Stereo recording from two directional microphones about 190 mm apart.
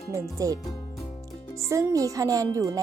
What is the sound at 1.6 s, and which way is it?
Speech, 15° right (ahead or behind).